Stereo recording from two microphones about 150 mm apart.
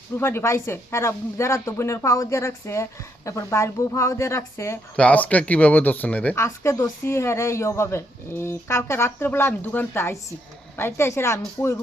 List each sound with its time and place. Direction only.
0.2 s a woman's voice: 15° left (ahead or behind)